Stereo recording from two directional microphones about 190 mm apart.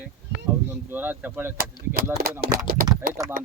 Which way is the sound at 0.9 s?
10° right (ahead or behind).